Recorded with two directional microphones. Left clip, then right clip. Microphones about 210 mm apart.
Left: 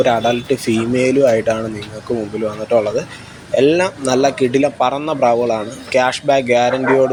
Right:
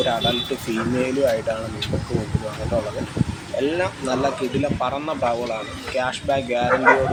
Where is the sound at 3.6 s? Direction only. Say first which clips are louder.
Left 9 dB; 30° left (ahead or behind).